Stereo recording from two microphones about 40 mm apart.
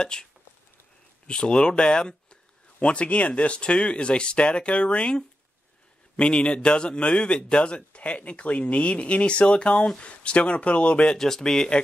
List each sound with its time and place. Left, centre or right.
0.0 s speech: centre
11.1 s speech: centre